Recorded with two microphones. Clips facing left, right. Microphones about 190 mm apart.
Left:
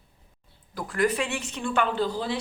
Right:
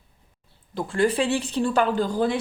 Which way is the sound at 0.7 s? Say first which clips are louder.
Right 3 dB; 25° right (ahead or behind).